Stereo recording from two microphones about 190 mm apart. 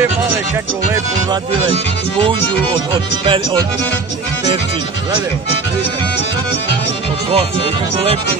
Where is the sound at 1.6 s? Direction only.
30° right (ahead or behind).